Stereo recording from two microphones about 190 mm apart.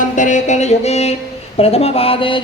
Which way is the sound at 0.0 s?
40° left (ahead or behind).